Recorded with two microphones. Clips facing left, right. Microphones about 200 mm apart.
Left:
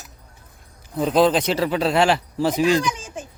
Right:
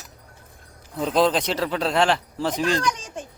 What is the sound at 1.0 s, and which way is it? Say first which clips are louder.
Speech: left 3 dB; 5° left (ahead or behind).